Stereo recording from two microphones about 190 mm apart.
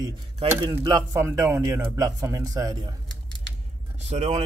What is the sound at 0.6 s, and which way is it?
A man's voice, 20° right (ahead or behind).